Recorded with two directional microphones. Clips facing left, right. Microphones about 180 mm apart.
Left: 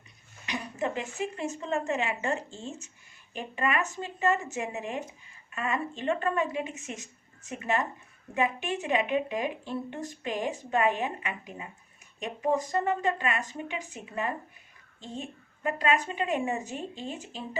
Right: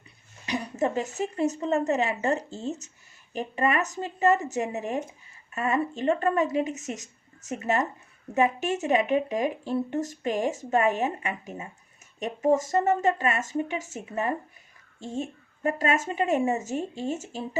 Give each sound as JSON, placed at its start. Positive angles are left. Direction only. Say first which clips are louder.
{"t": 0.4, "sound": "a woman's voice", "louder": "right 5 dB", "side_deg": -35}